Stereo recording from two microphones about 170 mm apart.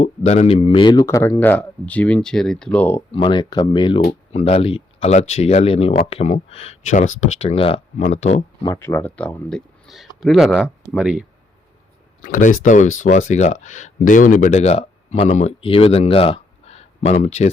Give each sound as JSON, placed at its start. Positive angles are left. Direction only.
{"t": 0.0, "sound": "speech", "side_deg": 40}
{"t": 3.1, "sound": "speech", "side_deg": 30}
{"t": 4.0, "sound": "speech", "side_deg": 40}
{"t": 8.6, "sound": "speech", "side_deg": 15}
{"t": 12.2, "sound": "speech", "side_deg": 50}